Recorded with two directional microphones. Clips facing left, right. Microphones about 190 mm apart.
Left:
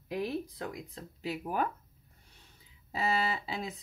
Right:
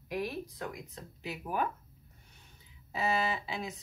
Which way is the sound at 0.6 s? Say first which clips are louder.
Left 1 dB; 30° left (ahead or behind).